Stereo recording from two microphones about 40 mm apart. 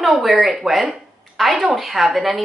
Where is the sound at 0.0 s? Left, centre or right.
Centre.